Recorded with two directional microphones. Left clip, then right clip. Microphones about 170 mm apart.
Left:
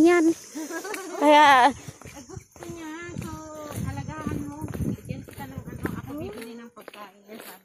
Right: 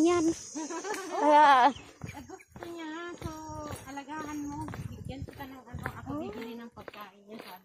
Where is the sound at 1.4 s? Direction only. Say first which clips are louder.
Left 4 dB; 20° left (ahead or behind).